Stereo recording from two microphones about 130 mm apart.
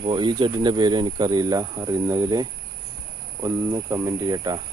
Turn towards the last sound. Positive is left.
turn(degrees=-30)  # may be behind; listen again after turning